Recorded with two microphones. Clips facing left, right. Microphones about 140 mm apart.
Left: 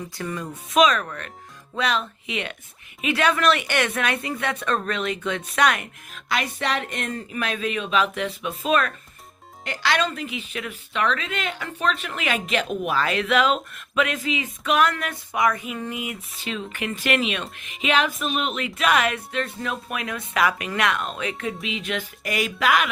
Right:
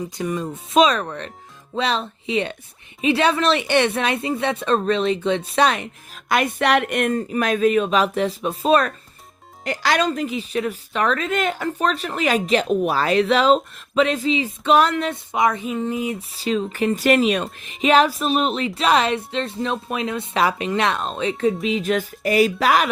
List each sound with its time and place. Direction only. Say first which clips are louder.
0.2 s speech: right 5 dB; 20° right (ahead or behind)
6.1 s speech: right 6 dB; 50° right (ahead or behind)
7.3 s speech: right 9 dB; 45° right (ahead or behind)